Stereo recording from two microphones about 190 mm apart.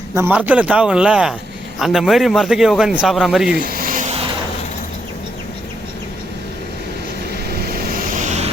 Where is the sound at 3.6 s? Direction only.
50° right (ahead or behind).